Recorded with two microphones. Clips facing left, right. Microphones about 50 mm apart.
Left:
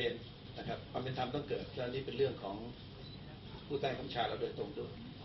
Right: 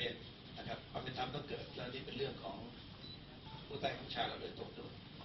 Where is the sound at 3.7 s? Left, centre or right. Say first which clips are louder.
Left 5 dB; centre.